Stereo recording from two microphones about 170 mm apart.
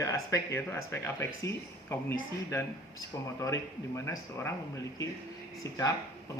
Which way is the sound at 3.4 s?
15° left (ahead or behind).